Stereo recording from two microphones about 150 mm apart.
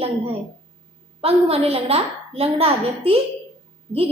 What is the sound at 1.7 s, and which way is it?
A woman's voice, 40° right (ahead or behind).